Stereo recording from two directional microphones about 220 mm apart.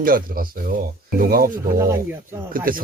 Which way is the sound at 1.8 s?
10° right (ahead or behind).